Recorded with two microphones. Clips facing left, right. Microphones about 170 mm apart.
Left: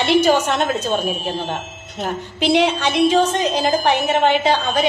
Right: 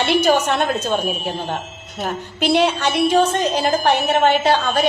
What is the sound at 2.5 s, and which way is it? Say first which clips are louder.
A woman's voice: even; 15° left (ahead or behind).